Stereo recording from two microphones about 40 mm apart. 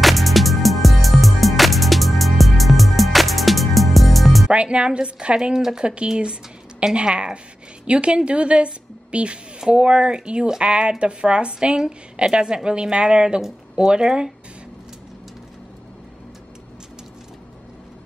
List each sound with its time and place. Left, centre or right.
0.0 s music: centre
4.5 s a woman's voice: right